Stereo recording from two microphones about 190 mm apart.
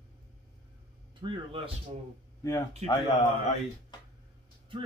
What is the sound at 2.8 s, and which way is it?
Speech, 35° right (ahead or behind).